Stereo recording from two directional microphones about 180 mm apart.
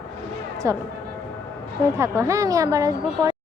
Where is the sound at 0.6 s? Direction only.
15° right (ahead or behind).